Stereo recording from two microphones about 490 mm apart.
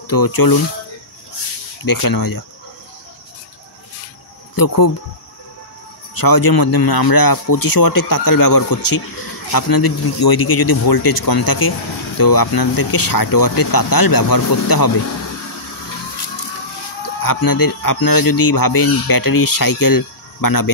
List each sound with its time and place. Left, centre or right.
0.0 s speech: left
1.9 s speech: left
4.6 s speech: left
6.1 s speech: left
17.2 s speech: left